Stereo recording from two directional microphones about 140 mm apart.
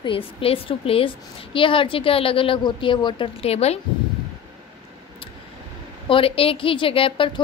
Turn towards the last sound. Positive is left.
turn(degrees=35)  # may be behind; listen again after turning